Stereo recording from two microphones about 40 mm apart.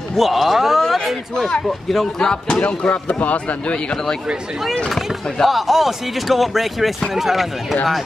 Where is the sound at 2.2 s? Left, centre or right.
Centre.